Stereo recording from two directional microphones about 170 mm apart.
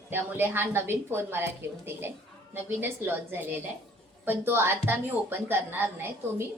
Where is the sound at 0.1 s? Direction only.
10° right (ahead or behind).